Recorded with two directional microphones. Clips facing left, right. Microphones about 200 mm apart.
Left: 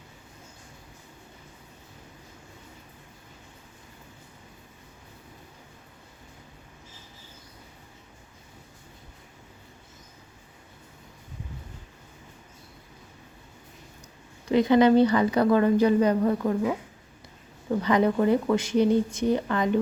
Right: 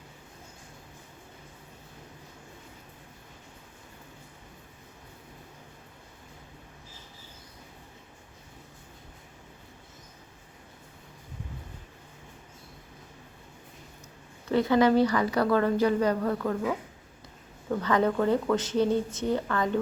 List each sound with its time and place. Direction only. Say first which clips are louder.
14.4 s a woman's voice: left 3 dB; 15° left (ahead or behind)